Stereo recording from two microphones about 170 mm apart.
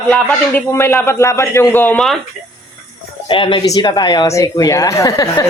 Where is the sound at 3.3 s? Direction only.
30° left (ahead or behind).